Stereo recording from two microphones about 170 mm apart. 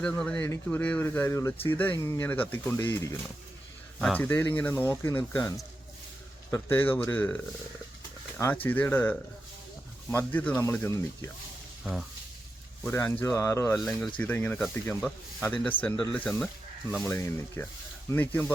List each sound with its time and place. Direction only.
0.0 s speech: 5° left (ahead or behind)
8.6 s speech: 10° left (ahead or behind)
12.8 s speech: 15° left (ahead or behind)